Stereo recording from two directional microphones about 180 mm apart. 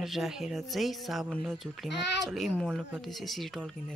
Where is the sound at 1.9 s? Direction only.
70° left (ahead or behind).